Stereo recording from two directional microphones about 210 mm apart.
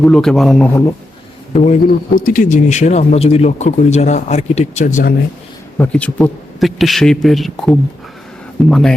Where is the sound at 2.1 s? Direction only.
40° left (ahead or behind).